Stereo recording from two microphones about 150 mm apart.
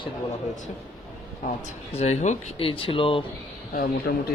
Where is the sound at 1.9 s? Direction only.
45° left (ahead or behind).